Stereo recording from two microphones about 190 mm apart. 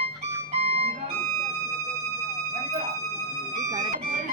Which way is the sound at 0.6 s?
55° right (ahead or behind).